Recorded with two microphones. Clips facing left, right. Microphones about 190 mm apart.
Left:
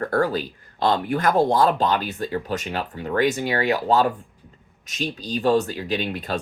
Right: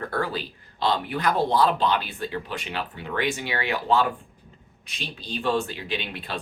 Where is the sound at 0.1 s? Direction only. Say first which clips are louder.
Left 7 dB; 45° left (ahead or behind).